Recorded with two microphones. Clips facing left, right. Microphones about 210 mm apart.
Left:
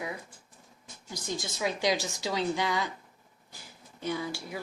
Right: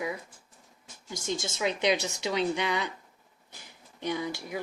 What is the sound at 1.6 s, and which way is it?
Speech, 20° right (ahead or behind).